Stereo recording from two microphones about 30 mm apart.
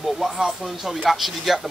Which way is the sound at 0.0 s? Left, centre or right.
Centre.